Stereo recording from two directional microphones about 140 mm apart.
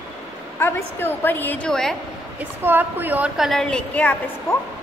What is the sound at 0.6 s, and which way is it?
A woman's voice, 15° left (ahead or behind).